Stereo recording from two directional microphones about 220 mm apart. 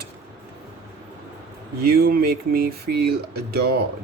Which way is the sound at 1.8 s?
45° right (ahead or behind).